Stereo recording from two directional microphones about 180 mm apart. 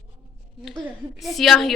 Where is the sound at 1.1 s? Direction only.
Centre (ahead or behind).